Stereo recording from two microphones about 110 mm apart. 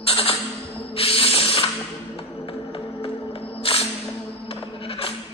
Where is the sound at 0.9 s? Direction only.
60° left (ahead or behind).